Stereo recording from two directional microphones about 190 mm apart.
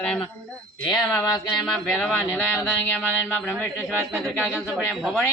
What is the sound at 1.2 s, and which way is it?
Speech, 20° left (ahead or behind).